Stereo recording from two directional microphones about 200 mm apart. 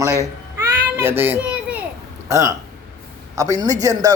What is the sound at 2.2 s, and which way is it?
Speech, 15° right (ahead or behind).